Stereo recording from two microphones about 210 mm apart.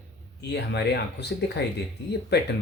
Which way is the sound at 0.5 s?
55° left (ahead or behind).